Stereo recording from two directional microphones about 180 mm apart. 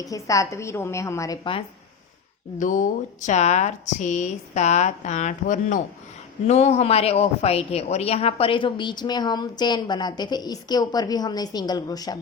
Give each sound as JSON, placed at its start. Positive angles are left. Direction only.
{"t": 0.0, "sound": "a woman's voice", "side_deg": 20}
{"t": 2.6, "sound": "a woman's voice", "side_deg": 45}